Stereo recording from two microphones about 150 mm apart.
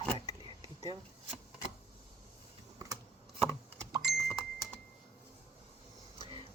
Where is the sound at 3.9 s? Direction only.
25° right (ahead or behind).